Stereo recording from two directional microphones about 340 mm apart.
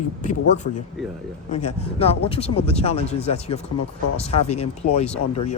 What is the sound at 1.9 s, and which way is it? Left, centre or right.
A man's voice, centre.